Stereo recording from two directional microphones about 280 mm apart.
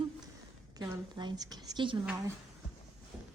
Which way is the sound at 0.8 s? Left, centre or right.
Centre.